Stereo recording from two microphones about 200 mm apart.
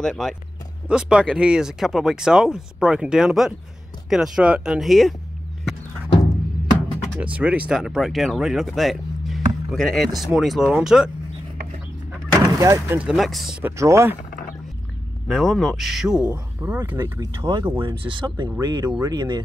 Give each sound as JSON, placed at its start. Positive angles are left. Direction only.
{"t": 0.0, "sound": "speech", "side_deg": 5}
{"t": 7.2, "sound": "speech", "side_deg": -5}
{"t": 12.4, "sound": "speech", "side_deg": -15}
{"t": 15.2, "sound": "speech", "side_deg": 5}